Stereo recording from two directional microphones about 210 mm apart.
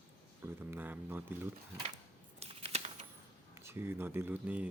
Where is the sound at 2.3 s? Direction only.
30° right (ahead or behind).